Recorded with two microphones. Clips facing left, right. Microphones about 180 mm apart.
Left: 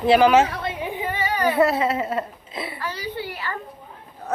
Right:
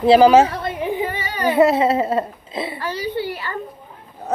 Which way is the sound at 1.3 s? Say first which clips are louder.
Right 4 dB; 25° right (ahead or behind).